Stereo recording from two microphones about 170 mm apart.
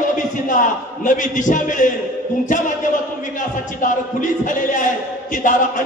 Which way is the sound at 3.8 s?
50° left (ahead or behind).